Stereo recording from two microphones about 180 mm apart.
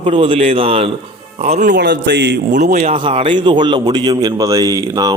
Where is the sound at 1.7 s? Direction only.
75° right (ahead or behind).